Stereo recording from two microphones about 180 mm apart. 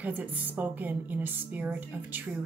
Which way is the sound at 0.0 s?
10° right (ahead or behind).